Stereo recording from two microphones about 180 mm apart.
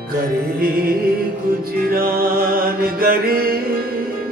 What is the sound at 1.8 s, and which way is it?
Mantra, 55° right (ahead or behind).